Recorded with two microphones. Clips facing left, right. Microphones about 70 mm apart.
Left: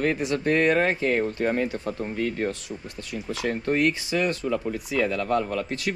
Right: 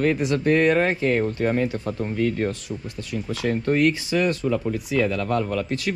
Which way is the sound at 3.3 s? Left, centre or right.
Left.